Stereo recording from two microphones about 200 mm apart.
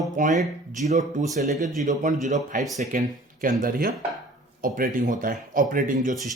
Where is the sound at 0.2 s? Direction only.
40° right (ahead or behind).